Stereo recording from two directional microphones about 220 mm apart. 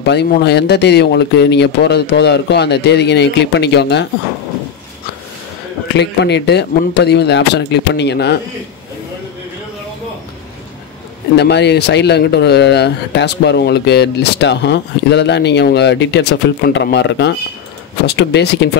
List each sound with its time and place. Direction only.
0.0 s speech: 50° left (ahead or behind)
5.9 s speech: 50° left (ahead or behind)
11.3 s speech: 50° left (ahead or behind)